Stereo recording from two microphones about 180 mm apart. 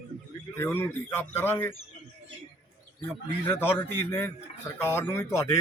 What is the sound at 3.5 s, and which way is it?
A man's voice, 10° left (ahead or behind).